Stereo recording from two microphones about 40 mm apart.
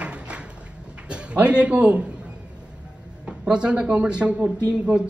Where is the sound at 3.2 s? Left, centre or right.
Right.